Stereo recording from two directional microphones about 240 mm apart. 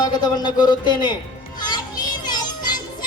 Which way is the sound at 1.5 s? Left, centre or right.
Centre.